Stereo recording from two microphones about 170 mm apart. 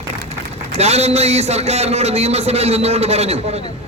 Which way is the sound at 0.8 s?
40° right (ahead or behind).